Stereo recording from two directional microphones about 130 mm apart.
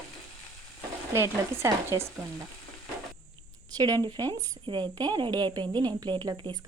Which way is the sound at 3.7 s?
30° right (ahead or behind).